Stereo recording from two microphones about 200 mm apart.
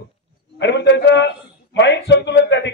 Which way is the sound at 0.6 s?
60° left (ahead or behind).